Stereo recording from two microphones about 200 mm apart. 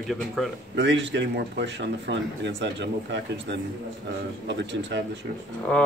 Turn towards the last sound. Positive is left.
turn(degrees=5)  # may be behind; listen again after turning